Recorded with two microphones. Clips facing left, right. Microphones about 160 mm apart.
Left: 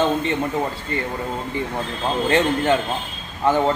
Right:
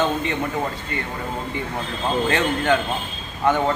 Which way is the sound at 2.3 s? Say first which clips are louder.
Left 4 dB; 30° left (ahead or behind).